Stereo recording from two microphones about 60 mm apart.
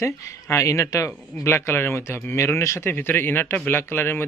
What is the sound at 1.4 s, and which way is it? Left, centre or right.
A man's voice, left.